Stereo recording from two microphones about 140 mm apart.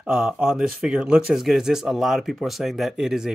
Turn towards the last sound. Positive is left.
turn(degrees=-5)  # may be behind; listen again after turning